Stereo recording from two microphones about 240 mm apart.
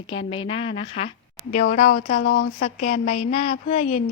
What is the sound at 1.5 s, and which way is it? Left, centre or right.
A woman's voice, left.